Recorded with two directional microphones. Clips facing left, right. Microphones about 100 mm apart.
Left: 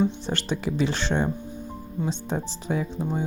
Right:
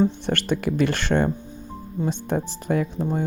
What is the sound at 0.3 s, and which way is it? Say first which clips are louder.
Speech: right 4 dB; 55° right (ahead or behind).